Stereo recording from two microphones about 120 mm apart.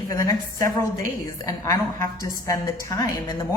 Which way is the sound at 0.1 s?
30° left (ahead or behind).